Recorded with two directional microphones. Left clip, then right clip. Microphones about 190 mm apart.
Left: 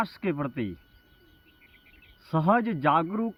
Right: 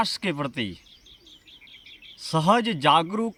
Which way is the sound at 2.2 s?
20° right (ahead or behind).